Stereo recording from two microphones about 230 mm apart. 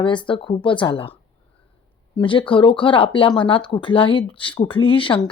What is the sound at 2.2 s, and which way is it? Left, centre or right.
Speech, left.